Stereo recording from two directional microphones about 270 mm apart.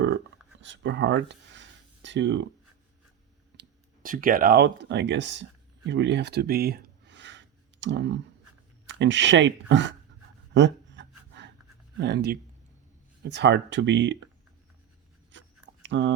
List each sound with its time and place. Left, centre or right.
0.6 s speech: right
3.6 s speech: right
10.5 s a sound: right
11.9 s speech: right
15.3 s writing: right
15.8 s speech: right